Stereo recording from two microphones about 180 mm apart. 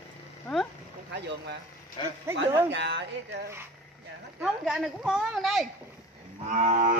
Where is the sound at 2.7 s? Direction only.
70° right (ahead or behind).